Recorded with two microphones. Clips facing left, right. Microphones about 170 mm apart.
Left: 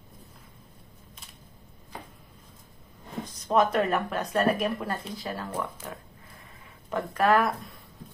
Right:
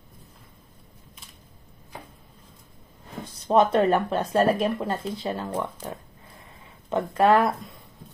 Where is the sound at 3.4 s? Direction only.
30° right (ahead or behind).